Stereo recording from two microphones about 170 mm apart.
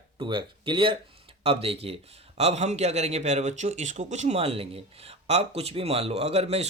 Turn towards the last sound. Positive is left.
turn(degrees=-40)  # may be behind; listen again after turning